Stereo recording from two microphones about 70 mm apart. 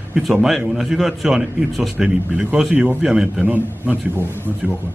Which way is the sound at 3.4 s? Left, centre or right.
Right.